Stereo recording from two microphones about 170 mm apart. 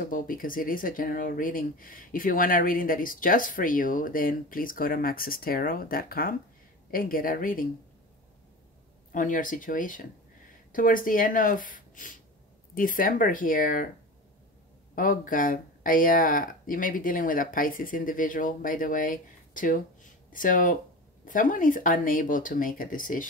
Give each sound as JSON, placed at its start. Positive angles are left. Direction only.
{"t": 0.0, "sound": "speech", "side_deg": 55}
{"t": 9.1, "sound": "speech", "side_deg": 50}
{"t": 15.0, "sound": "speech", "side_deg": 55}